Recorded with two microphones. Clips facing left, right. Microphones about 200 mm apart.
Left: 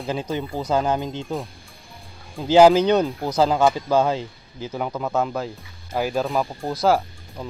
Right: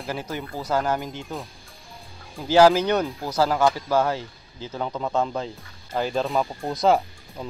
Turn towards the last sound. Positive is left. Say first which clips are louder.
# even
turn(degrees=0)  # may be behind; listen again after turning